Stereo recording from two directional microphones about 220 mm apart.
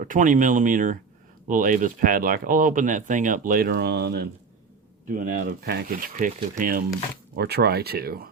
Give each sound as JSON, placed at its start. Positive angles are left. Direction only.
{"t": 0.0, "sound": "speech", "side_deg": -35}
{"t": 5.0, "sound": "speech", "side_deg": -35}